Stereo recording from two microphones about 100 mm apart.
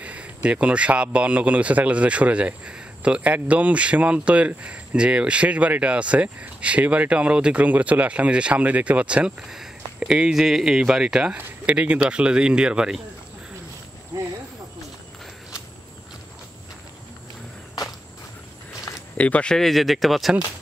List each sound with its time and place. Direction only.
0.0 s a man's voice: 15° right (ahead or behind)
18.7 s a sound: 30° left (ahead or behind)
19.1 s speech: 15° left (ahead or behind)